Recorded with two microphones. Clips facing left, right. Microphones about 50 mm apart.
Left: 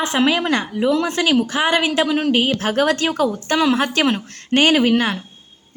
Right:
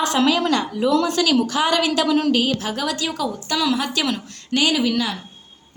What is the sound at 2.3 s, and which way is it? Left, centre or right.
A woman's voice, left.